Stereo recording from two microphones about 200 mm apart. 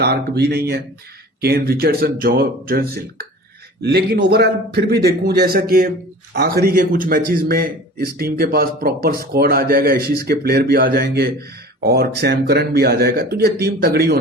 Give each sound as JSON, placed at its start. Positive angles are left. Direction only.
{"t": 0.0, "sound": "speech", "side_deg": -55}